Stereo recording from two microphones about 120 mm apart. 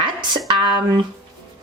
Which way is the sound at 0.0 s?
40° right (ahead or behind).